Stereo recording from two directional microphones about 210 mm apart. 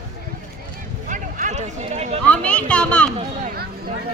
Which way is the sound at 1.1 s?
35° right (ahead or behind).